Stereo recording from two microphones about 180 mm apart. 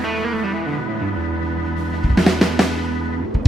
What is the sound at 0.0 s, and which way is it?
Music, centre (ahead or behind).